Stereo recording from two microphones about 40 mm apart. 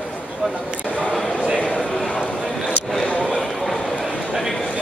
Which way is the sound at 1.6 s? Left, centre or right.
Left.